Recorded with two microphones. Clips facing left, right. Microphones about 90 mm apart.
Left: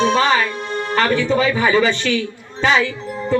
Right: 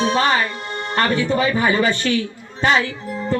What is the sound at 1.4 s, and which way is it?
Speech, 45° right (ahead or behind).